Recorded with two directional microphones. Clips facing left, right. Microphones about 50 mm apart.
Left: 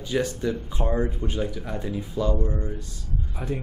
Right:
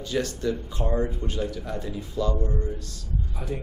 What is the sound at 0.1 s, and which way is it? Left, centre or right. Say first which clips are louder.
Speech: left 2 dB; centre.